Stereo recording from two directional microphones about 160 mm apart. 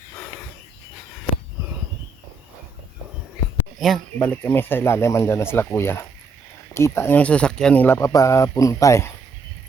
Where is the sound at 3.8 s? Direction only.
5° left (ahead or behind).